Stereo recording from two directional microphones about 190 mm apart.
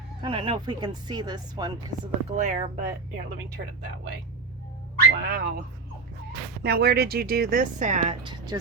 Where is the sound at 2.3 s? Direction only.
40° right (ahead or behind).